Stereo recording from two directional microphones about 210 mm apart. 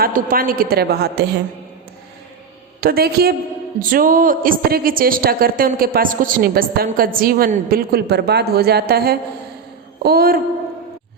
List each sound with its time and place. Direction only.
0.0 s a woman's voice: 45° right (ahead or behind)
2.8 s a woman's voice: 45° right (ahead or behind)